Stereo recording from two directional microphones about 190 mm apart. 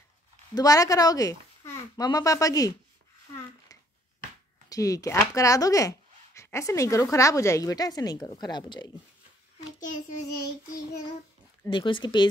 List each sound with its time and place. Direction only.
0.6 s a child's voice: 20° left (ahead or behind)
4.6 s speech: 20° left (ahead or behind)
9.8 s a child's voice: 40° left (ahead or behind)
11.7 s a child's voice: 25° left (ahead or behind)